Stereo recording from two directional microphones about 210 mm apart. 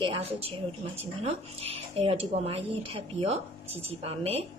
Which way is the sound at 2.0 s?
30° right (ahead or behind).